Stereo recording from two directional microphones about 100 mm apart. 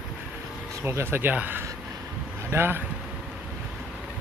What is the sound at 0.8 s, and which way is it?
Speech, 25° right (ahead or behind).